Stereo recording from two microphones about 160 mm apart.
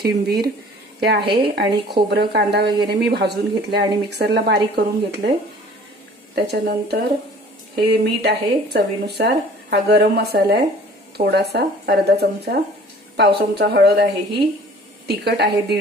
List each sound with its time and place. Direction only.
0.0 s speech: 80° right
1.2 s a woman's voice: 30° right (ahead or behind)
1.5 s speech: 90° right
6.3 s speech: 85° right
8.0 s speech: 90° right